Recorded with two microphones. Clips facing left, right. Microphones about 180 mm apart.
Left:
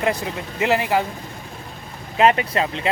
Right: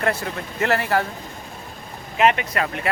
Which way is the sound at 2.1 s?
30° left (ahead or behind).